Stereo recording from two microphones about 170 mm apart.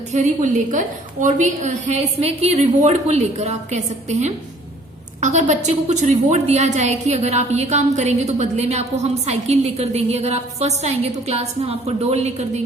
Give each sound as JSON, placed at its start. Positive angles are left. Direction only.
{"t": 0.1, "sound": "a woman's voice", "side_deg": -50}